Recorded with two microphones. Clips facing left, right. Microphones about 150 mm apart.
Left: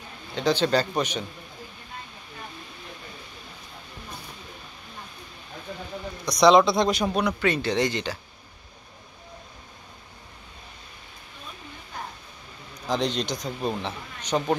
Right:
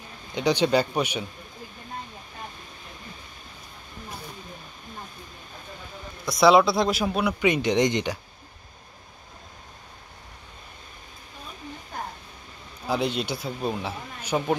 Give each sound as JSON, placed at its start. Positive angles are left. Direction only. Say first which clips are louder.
{"t": 0.3, "sound": "speech", "louder": "right 1 dB", "side_deg": -15}
{"t": 6.2, "sound": "speech", "louder": "even", "side_deg": -5}
{"t": 7.3, "sound": "speech", "louder": "right 2 dB", "side_deg": -15}
{"t": 12.8, "sound": "speech", "louder": "even", "side_deg": -10}